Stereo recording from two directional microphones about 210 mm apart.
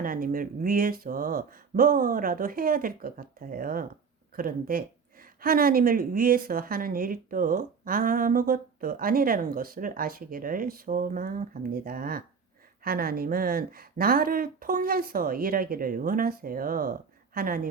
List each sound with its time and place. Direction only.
0.0 s a woman's voice: 40° right (ahead or behind)